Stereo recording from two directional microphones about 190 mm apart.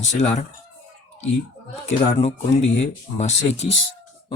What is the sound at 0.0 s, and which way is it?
Speech, 35° left (ahead or behind).